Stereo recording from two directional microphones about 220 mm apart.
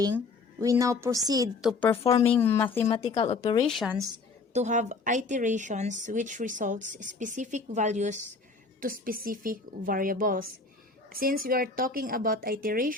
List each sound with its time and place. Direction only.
0.6 s a woman's voice: 15° right (ahead or behind)
1.6 s speech: 10° left (ahead or behind)
2.4 s speech: 10° left (ahead or behind)
2.9 s speech: 20° left (ahead or behind)
3.7 s speech: centre (ahead or behind)
4.5 s speech: 30° right (ahead or behind)